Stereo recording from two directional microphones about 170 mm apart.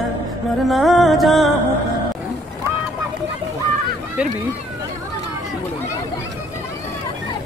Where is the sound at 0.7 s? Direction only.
Centre (ahead or behind).